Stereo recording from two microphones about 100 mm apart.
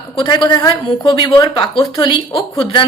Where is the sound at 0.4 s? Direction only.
45° left (ahead or behind).